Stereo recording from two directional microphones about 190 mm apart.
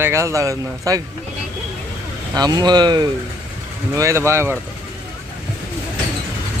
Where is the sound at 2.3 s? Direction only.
20° right (ahead or behind).